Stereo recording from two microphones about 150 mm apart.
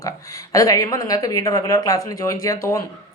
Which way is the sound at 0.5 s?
25° left (ahead or behind).